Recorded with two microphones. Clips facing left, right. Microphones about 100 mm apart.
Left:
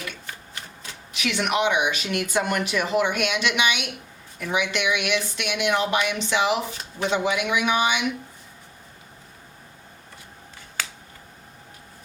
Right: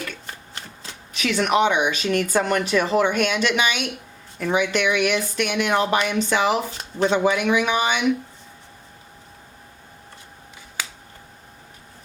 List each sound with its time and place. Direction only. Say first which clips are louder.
1.1 s speech: right 4 dB; 40° right (ahead or behind)
10.8 s finger snapping: even; 10° right (ahead or behind)